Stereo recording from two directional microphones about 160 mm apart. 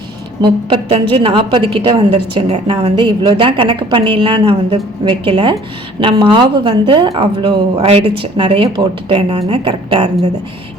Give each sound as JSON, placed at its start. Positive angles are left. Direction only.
{"t": 0.4, "sound": "a woman's voice", "side_deg": -35}